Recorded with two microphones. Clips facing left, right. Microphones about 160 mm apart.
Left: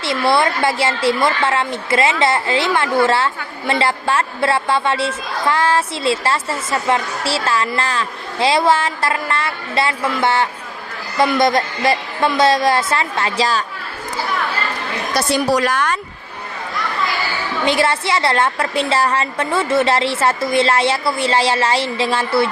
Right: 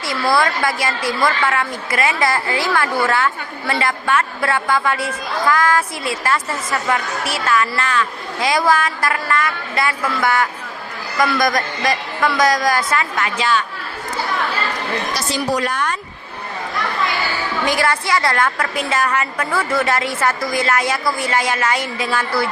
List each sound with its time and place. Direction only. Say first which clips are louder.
0.0 s speech: left 2 dB; 25° left (ahead or behind)
15.1 s a woman's voice: left 7 dB; 70° left (ahead or behind); by 16.0 s 90° left
17.7 s speech: left 2 dB; 25° left (ahead or behind)